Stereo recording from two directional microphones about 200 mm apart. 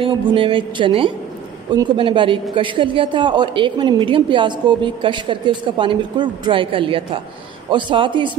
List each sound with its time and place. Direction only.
0.0 s a woman's voice: 25° right (ahead or behind)